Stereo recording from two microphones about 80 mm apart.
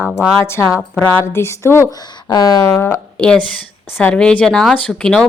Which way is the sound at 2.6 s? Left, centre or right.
Left.